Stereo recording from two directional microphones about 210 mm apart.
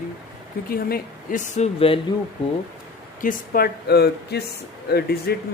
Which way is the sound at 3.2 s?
40° left (ahead or behind).